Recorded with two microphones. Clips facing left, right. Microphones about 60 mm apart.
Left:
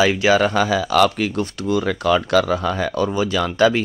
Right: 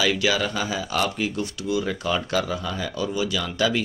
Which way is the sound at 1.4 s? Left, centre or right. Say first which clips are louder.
Left 5 dB; left.